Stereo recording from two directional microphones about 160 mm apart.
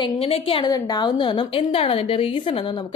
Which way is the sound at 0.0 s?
35° left (ahead or behind).